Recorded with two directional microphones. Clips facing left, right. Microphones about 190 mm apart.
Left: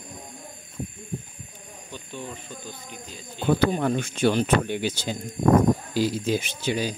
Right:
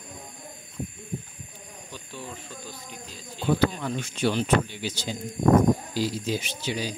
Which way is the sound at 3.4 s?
55° left (ahead or behind).